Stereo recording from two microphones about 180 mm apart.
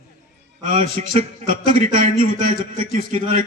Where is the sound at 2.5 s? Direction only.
40° right (ahead or behind).